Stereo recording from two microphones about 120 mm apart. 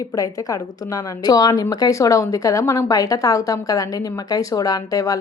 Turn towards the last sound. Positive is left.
turn(degrees=30)  # may be behind; listen again after turning